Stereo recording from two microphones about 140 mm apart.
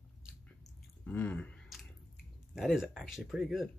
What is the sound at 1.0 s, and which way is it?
Chewing, 10° left (ahead or behind).